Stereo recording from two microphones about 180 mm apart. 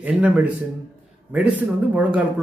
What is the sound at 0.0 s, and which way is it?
A man's voice, 10° right (ahead or behind).